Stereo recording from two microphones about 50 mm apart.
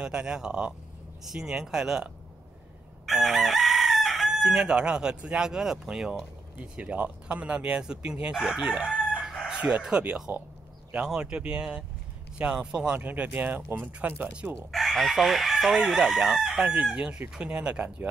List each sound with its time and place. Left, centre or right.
0.0 s speech: centre
3.1 s chicken: centre
4.6 s speech: centre
6.6 s speech: right
8.4 s chicken: centre
11.2 s speech: right
13.0 s speech: right
14.7 s chicken: centre
15.5 s speech: centre
17.4 s speech: right